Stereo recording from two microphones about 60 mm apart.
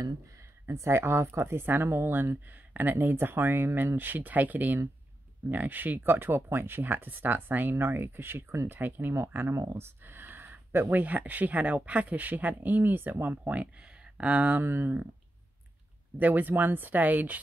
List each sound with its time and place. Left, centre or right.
0.7 s speech: right
9.5 s speech: right
14.6 s speech: right
16.2 s speech: right